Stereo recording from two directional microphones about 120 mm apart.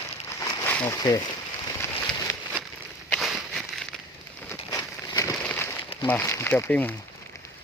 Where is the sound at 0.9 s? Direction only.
30° left (ahead or behind).